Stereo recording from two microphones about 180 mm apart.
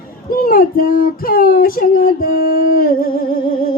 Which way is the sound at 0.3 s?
55° left (ahead or behind).